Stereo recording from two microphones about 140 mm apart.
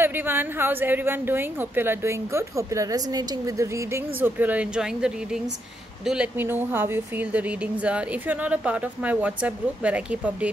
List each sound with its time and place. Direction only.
0.0 s speech: 15° right (ahead or behind)